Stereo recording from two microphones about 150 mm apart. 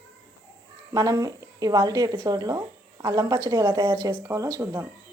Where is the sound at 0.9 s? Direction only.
25° right (ahead or behind).